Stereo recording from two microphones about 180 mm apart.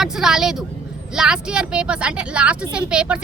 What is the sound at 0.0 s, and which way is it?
Speech, 5° right (ahead or behind).